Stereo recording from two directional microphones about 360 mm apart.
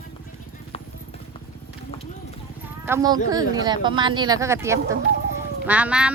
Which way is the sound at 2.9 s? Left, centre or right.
Centre.